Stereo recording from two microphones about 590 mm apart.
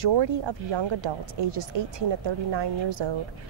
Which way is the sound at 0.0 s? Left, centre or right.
Right.